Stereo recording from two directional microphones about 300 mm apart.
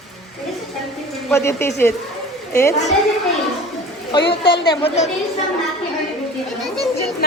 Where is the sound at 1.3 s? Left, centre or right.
Centre.